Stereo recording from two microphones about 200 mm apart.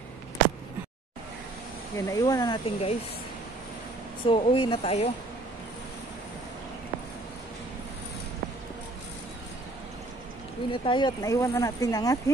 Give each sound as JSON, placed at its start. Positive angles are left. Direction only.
{"t": 2.0, "sound": "speech", "side_deg": 15}
{"t": 4.2, "sound": "speech", "side_deg": 25}
{"t": 10.7, "sound": "speech", "side_deg": 25}